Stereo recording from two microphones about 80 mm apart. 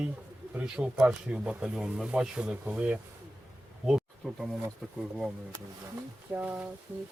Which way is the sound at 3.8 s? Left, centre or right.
Centre.